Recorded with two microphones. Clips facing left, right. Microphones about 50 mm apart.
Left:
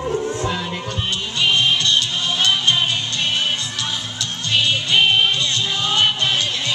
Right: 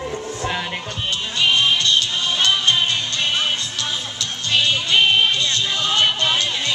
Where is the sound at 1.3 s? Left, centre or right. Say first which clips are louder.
Even; centre.